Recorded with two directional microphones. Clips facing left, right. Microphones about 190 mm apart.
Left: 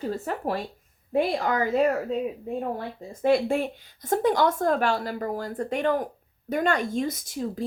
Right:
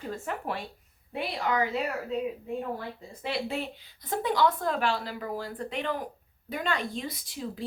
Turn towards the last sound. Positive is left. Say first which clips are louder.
# left 6 dB
turn(degrees=45)  # may be behind; listen again after turning